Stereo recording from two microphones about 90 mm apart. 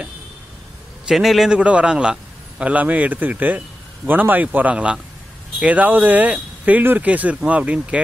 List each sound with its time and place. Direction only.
1.0 s a man's voice: centre (ahead or behind)
1.6 s speech: 15° right (ahead or behind)